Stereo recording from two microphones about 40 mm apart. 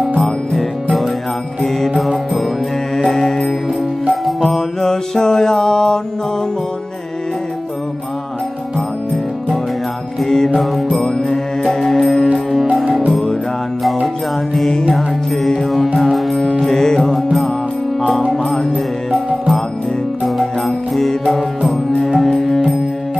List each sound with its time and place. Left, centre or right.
1.6 s mantra: centre
3.0 s music: centre
10.2 s mantra: centre
11.0 s music: centre
14.7 s music: centre
15.6 s music: centre
16.7 s music: centre
20.2 s music: centre